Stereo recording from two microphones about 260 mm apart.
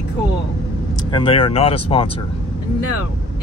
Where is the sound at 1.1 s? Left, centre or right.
Left.